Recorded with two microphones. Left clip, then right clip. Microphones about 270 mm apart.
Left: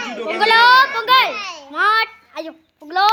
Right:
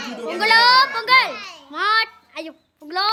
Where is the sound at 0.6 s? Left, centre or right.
Right.